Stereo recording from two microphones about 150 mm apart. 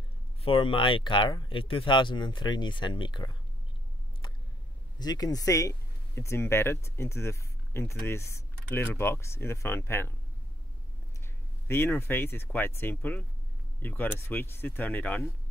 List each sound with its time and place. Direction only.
0.4 s speech: 35° left (ahead or behind)
4.9 s speech: 25° left (ahead or behind)
11.6 s speech: 15° left (ahead or behind)